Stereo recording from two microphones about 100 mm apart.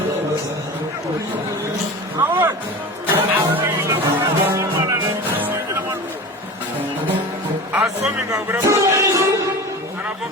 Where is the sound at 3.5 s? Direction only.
20° right (ahead or behind).